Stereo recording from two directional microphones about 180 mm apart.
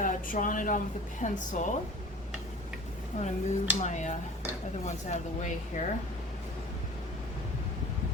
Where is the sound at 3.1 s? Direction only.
40° left (ahead or behind).